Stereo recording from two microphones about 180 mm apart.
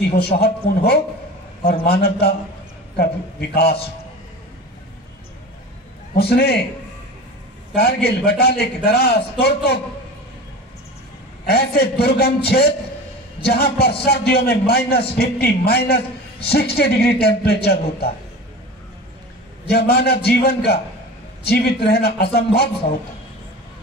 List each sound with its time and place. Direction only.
0.4 s a man's voice: 60° left (ahead or behind)
6.1 s a man's voice: 60° left (ahead or behind)
7.7 s a man's voice: 60° left (ahead or behind)
11.4 s a man's voice: 60° left (ahead or behind)
19.7 s a man's voice: 65° left (ahead or behind)